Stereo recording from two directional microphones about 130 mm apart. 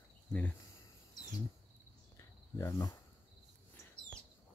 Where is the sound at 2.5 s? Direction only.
30° left (ahead or behind).